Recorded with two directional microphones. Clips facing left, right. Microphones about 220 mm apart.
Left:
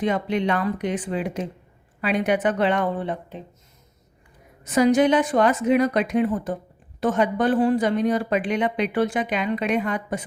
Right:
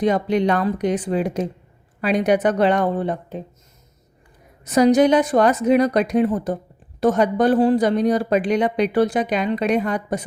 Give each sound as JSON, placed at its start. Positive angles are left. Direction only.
{"t": 0.0, "sound": "speech", "side_deg": -40}
{"t": 4.6, "sound": "speech", "side_deg": -40}